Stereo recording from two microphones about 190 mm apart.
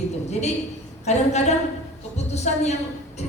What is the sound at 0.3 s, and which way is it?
A woman's voice, 35° left (ahead or behind).